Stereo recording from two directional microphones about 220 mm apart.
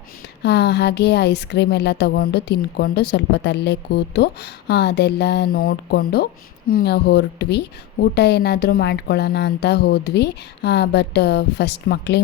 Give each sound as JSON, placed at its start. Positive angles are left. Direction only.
{"t": 0.4, "sound": "speech", "side_deg": 50}